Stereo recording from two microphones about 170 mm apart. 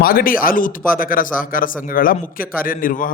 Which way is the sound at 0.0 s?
60° left (ahead or behind).